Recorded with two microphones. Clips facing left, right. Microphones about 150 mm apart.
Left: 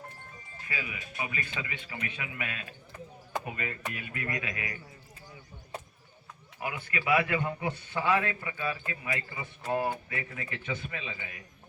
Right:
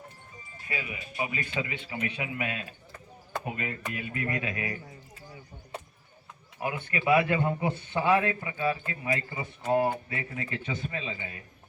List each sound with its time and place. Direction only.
0.7 s speech: 25° right (ahead or behind)
6.6 s speech: 25° right (ahead or behind)